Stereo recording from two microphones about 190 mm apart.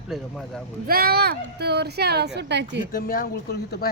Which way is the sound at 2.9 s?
50° left (ahead or behind).